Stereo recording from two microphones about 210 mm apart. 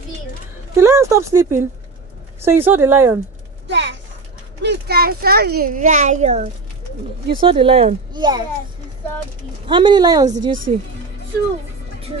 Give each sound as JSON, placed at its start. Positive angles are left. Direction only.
{"t": 0.7, "sound": "speech", "side_deg": -15}
{"t": 4.6, "sound": "a child's voice", "side_deg": -50}
{"t": 9.7, "sound": "a child's voice", "side_deg": -20}
{"t": 10.5, "sound": "a woman's voice", "side_deg": -40}